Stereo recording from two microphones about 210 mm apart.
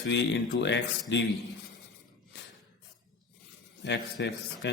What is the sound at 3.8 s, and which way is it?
Speech, 55° left (ahead or behind).